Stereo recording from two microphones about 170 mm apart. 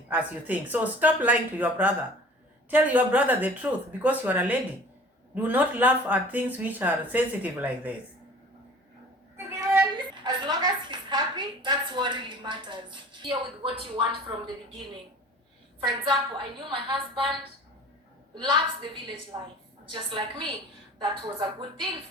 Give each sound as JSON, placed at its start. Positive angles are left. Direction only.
{"t": 0.1, "sound": "speech", "side_deg": -10}
{"t": 10.0, "sound": "a sound", "side_deg": -25}
{"t": 15.8, "sound": "speech", "side_deg": -25}
{"t": 18.3, "sound": "speech", "side_deg": -25}